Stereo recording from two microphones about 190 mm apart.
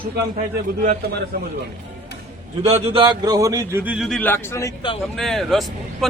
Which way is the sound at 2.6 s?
30° right (ahead or behind).